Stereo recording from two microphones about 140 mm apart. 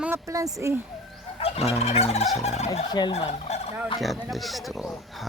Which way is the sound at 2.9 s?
30° left (ahead or behind).